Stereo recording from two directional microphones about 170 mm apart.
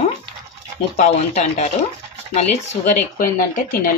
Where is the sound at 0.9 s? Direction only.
40° left (ahead or behind).